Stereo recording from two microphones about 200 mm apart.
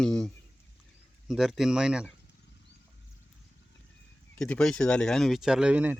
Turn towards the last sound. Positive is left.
turn(degrees=-10)  # may be behind; listen again after turning